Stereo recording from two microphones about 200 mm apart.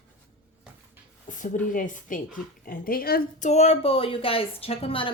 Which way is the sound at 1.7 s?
40° left (ahead or behind).